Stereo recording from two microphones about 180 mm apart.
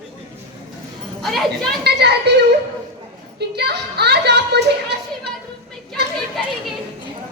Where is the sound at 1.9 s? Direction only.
65° right (ahead or behind).